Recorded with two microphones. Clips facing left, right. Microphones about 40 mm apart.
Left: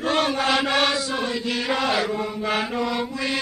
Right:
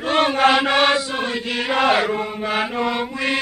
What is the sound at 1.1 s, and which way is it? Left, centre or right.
Chant, right.